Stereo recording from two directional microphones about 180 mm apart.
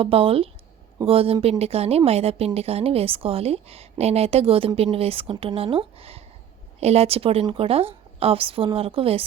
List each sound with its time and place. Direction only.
0.0 s speech: 30° right (ahead or behind)